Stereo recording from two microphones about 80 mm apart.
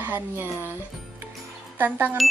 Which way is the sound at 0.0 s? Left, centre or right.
Right.